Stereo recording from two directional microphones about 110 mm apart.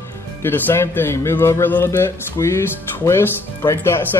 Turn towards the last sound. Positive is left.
turn(degrees=25)  # may be behind; listen again after turning